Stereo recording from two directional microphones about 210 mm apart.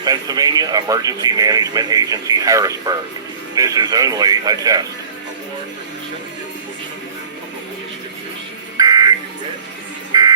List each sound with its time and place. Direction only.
0.0 s speech: 20° right (ahead or behind)
8.8 s buzzer: 15° right (ahead or behind)
10.1 s music: 20° right (ahead or behind)